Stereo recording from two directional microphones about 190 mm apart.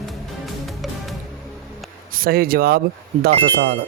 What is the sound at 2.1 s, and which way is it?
Speech, 50° right (ahead or behind).